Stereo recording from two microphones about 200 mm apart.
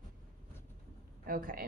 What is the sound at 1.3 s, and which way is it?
Speech, 45° right (ahead or behind).